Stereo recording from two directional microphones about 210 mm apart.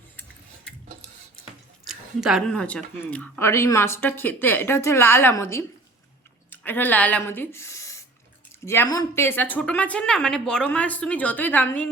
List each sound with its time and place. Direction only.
1.9 s speech: centre (ahead or behind)